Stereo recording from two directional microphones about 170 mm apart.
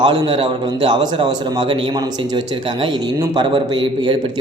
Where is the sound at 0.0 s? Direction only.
25° right (ahead or behind).